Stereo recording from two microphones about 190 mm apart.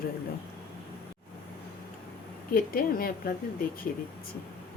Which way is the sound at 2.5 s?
50° left (ahead or behind).